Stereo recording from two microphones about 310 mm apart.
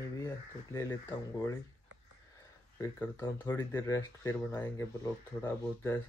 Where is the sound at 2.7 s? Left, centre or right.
Centre.